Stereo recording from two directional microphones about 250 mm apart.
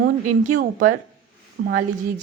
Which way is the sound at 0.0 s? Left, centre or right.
Right.